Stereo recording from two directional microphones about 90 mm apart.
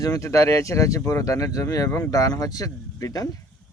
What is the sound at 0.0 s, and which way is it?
Speech, 35° left (ahead or behind).